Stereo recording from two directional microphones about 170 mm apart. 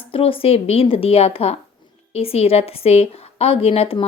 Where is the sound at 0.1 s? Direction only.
35° left (ahead or behind).